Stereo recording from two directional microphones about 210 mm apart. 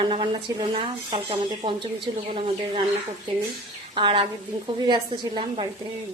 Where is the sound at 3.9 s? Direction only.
25° right (ahead or behind).